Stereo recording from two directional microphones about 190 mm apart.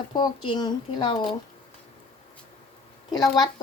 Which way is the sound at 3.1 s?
20° left (ahead or behind).